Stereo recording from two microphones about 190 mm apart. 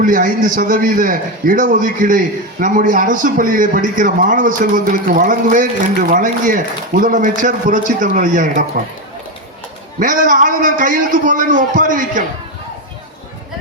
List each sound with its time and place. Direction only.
0.0 s a man's voice: 45° right (ahead or behind)
10.0 s a man's voice: 45° right (ahead or behind)